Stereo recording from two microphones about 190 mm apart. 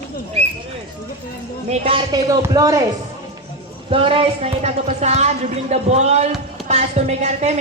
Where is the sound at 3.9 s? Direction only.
30° right (ahead or behind).